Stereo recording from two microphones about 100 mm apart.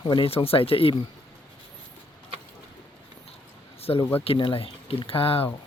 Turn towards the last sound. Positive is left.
turn(degrees=70)  # may be behind; listen again after turning